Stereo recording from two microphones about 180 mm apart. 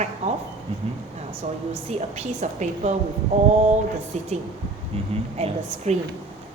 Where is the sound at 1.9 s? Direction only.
35° right (ahead or behind).